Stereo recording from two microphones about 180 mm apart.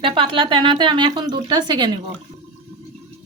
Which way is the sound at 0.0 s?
30° right (ahead or behind).